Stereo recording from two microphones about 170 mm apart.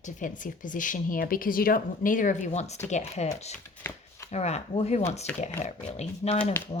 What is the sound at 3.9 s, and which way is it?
Speech, 15° left (ahead or behind).